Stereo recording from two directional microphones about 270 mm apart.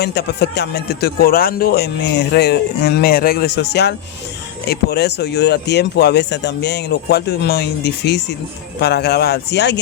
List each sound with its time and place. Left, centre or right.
0.0 s speech: left